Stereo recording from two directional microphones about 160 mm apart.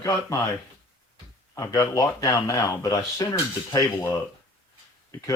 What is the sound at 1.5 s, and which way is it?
Speech, 25° left (ahead or behind).